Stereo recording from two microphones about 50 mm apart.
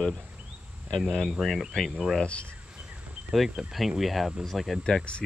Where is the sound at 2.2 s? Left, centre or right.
Left.